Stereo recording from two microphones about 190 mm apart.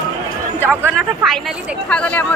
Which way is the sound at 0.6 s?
10° right (ahead or behind).